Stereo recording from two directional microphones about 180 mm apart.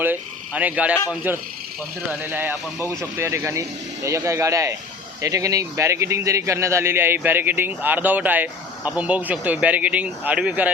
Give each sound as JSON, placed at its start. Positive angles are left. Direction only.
{"t": 0.0, "sound": "a man's voice", "side_deg": -10}
{"t": 2.2, "sound": "a man's voice", "side_deg": -10}